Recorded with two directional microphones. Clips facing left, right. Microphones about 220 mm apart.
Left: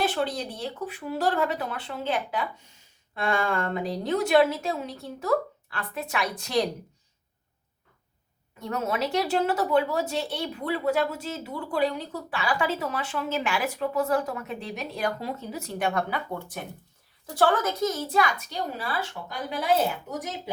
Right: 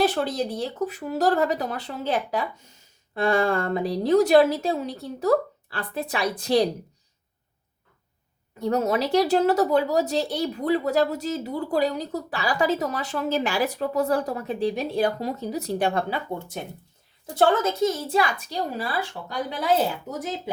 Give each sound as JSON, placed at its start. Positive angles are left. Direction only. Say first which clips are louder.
{"t": 0.0, "sound": "speech", "louder": "right 4 dB", "side_deg": -40}
{"t": 8.6, "sound": "speech", "louder": "right 5 dB", "side_deg": -35}